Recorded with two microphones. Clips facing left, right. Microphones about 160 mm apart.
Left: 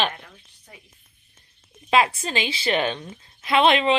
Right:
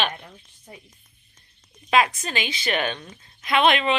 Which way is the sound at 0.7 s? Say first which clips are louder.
Right 5 dB; 25° right (ahead or behind).